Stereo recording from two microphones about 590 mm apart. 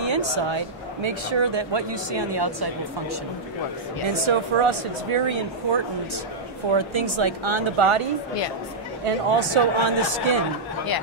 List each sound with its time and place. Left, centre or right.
0.0 s speech: right
4.1 s speech: right
9.0 s speech: right